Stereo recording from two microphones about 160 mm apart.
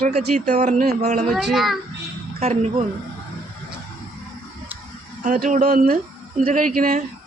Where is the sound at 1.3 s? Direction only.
Centre (ahead or behind).